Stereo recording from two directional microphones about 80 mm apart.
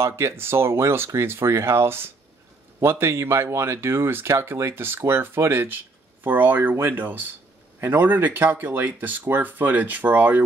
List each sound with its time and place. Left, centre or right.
0.0 s speech: right